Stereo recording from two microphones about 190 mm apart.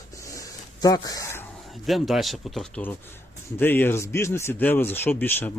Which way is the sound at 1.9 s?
Centre (ahead or behind).